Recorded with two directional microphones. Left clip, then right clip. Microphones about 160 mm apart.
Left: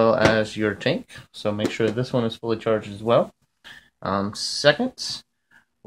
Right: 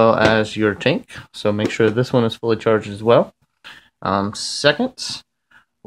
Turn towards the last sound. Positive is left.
turn(degrees=-40)  # may be behind; listen again after turning